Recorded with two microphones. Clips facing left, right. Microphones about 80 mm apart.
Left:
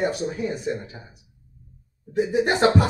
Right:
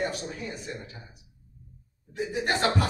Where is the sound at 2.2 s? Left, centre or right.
Centre.